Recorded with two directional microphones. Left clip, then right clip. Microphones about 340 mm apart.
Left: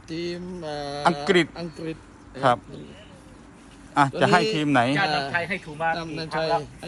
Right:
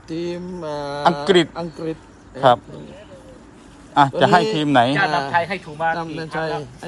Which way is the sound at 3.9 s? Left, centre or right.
Centre.